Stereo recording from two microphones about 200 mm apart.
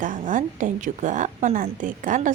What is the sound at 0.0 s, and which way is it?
A woman's voice, 40° right (ahead or behind).